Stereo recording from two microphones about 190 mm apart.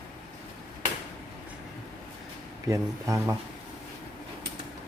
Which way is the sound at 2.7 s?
15° right (ahead or behind).